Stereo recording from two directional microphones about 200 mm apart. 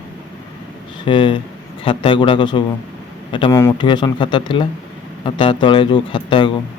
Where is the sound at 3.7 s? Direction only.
25° left (ahead or behind).